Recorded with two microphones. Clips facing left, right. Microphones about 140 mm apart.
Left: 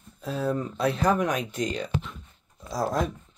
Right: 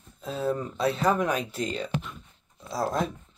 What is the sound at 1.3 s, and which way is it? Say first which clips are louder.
Speech: left 1 dB; 30° right (ahead or behind).